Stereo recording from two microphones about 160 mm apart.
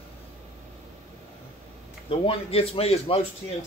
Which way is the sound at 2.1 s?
35° left (ahead or behind).